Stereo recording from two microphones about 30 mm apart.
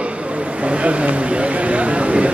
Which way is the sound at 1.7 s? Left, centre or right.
Right.